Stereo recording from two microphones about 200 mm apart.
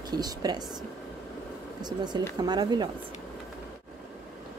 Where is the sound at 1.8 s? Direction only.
20° right (ahead or behind).